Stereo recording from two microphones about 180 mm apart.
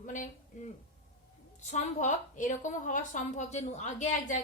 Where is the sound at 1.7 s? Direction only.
45° left (ahead or behind).